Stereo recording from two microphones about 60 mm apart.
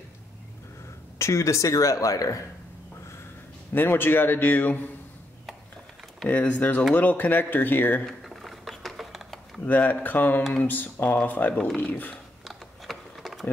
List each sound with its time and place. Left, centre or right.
1.1 s speech: left
3.7 s speech: left
6.2 s speech: left
8.0 s computer keyboard: centre
9.7 s speech: left
11.6 s speech: centre
12.4 s a sound: centre